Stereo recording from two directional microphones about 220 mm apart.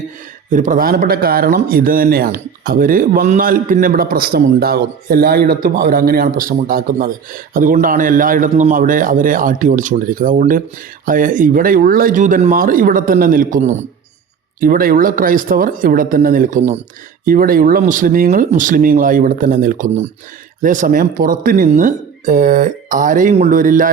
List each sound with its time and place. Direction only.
0.5 s speech: 35° right (ahead or behind)